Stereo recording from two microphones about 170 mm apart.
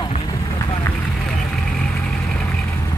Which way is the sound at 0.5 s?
20° left (ahead or behind).